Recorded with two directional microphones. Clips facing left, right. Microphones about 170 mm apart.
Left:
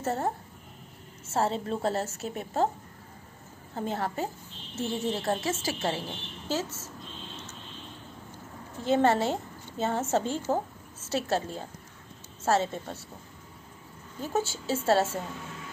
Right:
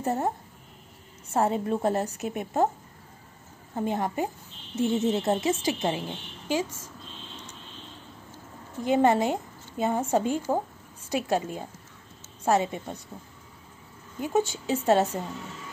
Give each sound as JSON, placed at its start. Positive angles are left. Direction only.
{"t": 0.0, "sound": "a woman's voice", "side_deg": -15}
{"t": 3.7, "sound": "a woman's voice", "side_deg": -15}
{"t": 8.8, "sound": "a woman's voice", "side_deg": -15}
{"t": 14.2, "sound": "a woman's voice", "side_deg": -15}